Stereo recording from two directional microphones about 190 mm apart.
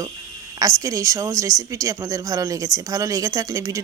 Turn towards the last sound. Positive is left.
turn(degrees=-15)  # may be behind; listen again after turning